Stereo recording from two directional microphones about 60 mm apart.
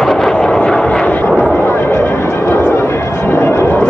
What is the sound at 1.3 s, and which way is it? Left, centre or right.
Vehicle, centre.